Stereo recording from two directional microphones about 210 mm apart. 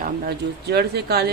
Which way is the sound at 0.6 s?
50° right (ahead or behind).